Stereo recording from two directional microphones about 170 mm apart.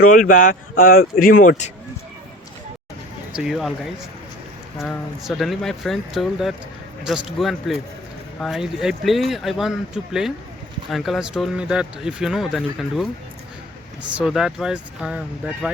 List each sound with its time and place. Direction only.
0.0 s speech: 50° left (ahead or behind)
3.3 s speech: centre (ahead or behind)